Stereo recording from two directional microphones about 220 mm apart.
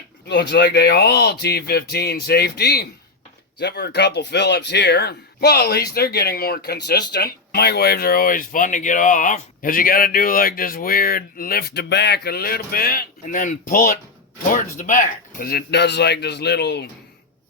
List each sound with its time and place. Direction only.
0.3 s speech: 50° left (ahead or behind)